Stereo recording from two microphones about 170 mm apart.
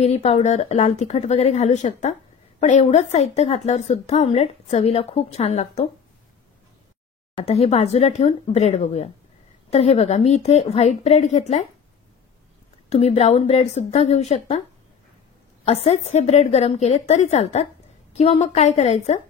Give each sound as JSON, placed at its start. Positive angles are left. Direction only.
{"t": 0.0, "sound": "a woman's voice", "side_deg": 40}
{"t": 7.3, "sound": "a woman's voice", "side_deg": 35}
{"t": 12.9, "sound": "a woman's voice", "side_deg": 40}
{"t": 15.6, "sound": "a woman's voice", "side_deg": 40}